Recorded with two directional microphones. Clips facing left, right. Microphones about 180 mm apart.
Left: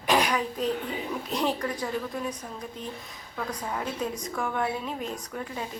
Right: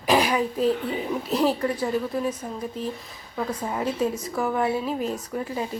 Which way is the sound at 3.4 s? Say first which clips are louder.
Right 5 dB; 10° right (ahead or behind).